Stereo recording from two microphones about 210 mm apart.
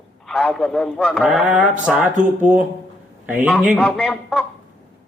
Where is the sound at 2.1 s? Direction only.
35° right (ahead or behind).